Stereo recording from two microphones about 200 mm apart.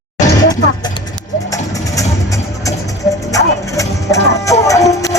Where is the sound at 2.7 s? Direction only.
15° left (ahead or behind).